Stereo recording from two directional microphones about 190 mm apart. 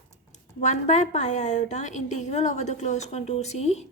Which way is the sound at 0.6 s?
40° left (ahead or behind).